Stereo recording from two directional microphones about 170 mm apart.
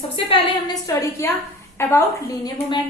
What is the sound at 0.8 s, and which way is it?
A woman's voice, 20° left (ahead or behind).